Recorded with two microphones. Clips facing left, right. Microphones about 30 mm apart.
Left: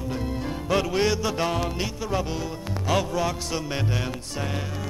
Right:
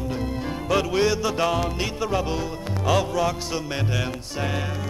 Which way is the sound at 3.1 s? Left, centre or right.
Centre.